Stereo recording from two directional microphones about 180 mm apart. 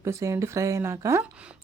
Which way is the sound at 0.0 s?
15° right (ahead or behind).